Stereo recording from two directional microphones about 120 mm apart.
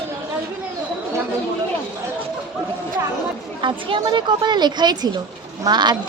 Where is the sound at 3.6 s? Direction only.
45° right (ahead or behind).